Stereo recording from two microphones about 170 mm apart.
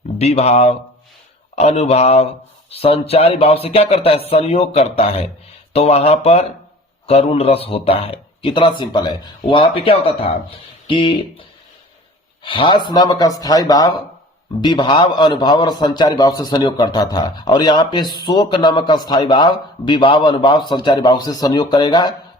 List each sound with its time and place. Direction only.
0.2 s speech: 40° left (ahead or behind)
12.4 s a man's voice: 30° left (ahead or behind)